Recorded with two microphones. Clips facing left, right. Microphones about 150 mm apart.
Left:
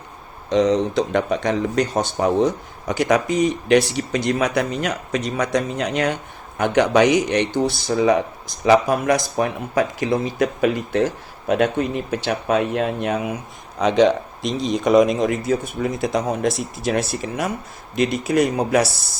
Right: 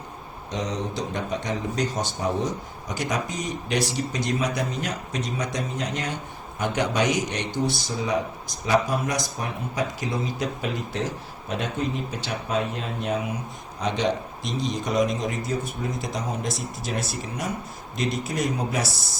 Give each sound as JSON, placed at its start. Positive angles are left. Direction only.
{"t": 0.5, "sound": "speech", "side_deg": 75}
{"t": 8.6, "sound": "speech", "side_deg": 70}
{"t": 13.7, "sound": "speech", "side_deg": 90}